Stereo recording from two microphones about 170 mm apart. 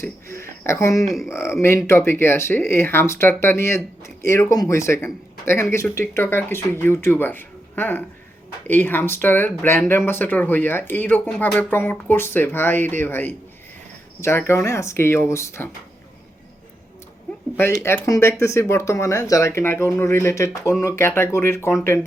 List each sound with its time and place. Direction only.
0.0 s a sound: 15° left (ahead or behind)
0.6 s speech: 15° left (ahead or behind)
17.6 s speech: 15° left (ahead or behind)